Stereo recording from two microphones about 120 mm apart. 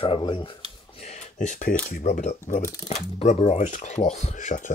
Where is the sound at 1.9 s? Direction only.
90° left.